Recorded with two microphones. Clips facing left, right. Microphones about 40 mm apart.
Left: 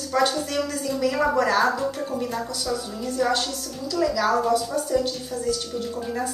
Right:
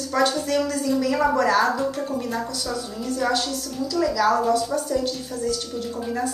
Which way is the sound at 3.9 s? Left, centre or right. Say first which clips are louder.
Right 1 dB; centre.